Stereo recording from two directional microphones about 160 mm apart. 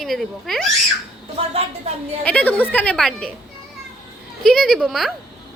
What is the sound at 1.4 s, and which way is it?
Speech, 35° right (ahead or behind).